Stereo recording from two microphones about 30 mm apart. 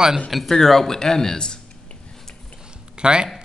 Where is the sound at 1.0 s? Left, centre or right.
Left.